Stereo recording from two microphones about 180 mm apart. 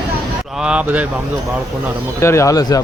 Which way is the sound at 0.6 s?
5° right (ahead or behind).